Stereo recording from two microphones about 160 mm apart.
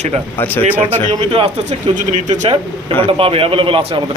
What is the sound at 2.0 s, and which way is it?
Speech, 50° right (ahead or behind).